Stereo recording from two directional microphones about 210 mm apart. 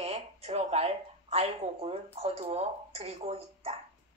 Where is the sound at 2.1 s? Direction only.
30° right (ahead or behind).